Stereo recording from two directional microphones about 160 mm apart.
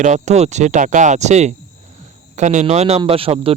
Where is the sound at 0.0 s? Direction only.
45° right (ahead or behind).